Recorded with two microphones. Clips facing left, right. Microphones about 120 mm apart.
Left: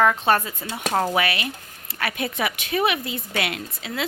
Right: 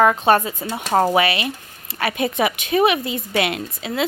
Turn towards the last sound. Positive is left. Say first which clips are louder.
# right 5 dB
turn(degrees=-20)  # may be behind; listen again after turning